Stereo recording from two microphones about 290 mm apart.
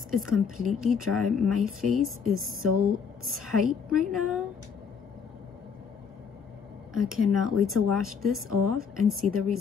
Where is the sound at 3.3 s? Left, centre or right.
Centre.